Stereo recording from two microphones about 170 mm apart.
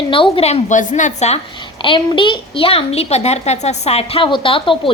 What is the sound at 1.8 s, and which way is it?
A woman's voice, 30° left (ahead or behind).